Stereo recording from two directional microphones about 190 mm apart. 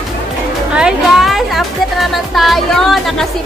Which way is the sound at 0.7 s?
Centre (ahead or behind).